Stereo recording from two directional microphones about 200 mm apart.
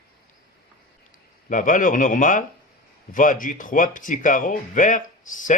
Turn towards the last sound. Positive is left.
turn(degrees=40)  # may be behind; listen again after turning